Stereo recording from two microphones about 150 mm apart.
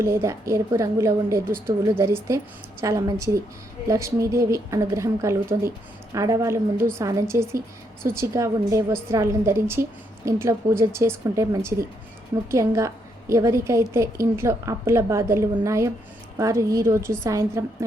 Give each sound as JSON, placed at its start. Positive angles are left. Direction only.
{"t": 0.0, "sound": "a woman's voice", "side_deg": -20}